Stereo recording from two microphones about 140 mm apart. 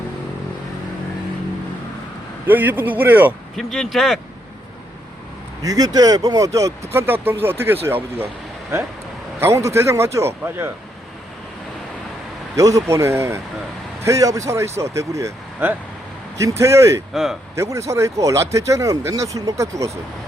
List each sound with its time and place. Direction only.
2.5 s a man's voice: 10° right (ahead or behind)
3.5 s speech: centre (ahead or behind)
5.6 s a man's voice: 25° right (ahead or behind)
12.5 s speech: 25° right (ahead or behind)